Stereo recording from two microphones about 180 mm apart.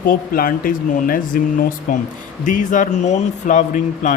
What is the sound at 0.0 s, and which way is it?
Speech, 55° left (ahead or behind).